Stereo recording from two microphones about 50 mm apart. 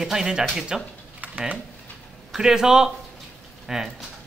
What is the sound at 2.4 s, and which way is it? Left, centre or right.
A man's voice, centre.